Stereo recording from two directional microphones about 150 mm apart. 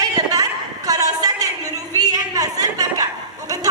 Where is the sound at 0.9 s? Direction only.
25° right (ahead or behind).